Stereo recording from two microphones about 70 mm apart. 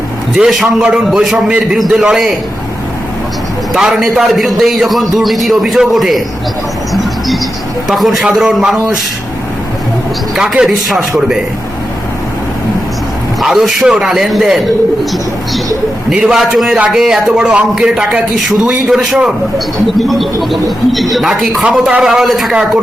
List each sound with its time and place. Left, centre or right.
0.3 s a man's voice: centre
3.8 s a man's voice: centre
6.9 s music: centre
7.9 s a man's voice: centre
10.6 s speech: centre
13.4 s a man's voice: centre
16.0 s a man's voice: centre